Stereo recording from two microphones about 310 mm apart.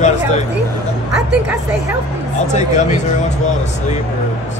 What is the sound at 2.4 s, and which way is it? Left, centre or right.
Speech, left.